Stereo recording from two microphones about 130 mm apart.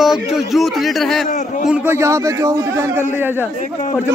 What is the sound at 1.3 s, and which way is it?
Speech, 70° left (ahead or behind).